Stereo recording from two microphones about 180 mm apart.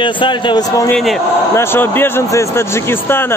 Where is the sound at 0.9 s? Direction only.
Centre (ahead or behind).